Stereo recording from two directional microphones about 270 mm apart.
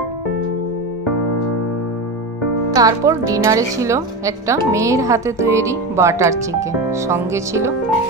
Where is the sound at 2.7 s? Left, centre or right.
Centre.